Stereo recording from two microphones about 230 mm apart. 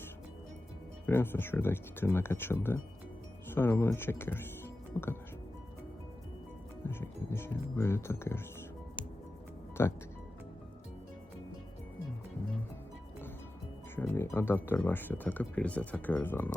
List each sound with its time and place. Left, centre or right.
1.0 s speech: centre
6.8 s speech: centre
9.8 s speech: centre
13.9 s speech: centre